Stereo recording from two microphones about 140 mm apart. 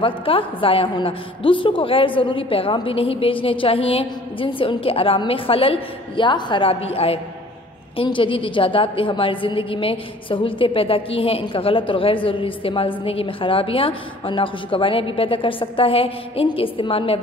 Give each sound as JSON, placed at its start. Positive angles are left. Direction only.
{"t": 0.0, "sound": "a woman's voice", "side_deg": 40}